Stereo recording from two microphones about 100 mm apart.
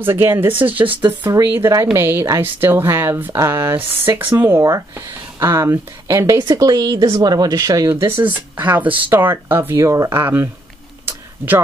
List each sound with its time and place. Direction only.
0.0 s speech: 20° right (ahead or behind)
6.3 s speech: 45° right (ahead or behind)
8.2 s speech: 20° right (ahead or behind)